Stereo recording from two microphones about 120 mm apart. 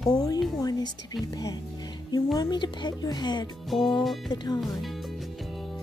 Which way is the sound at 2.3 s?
35° left (ahead or behind).